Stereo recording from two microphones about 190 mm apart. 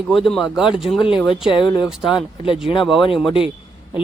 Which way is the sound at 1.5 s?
25° left (ahead or behind).